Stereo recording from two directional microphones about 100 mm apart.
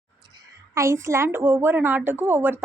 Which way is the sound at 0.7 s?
30° right (ahead or behind).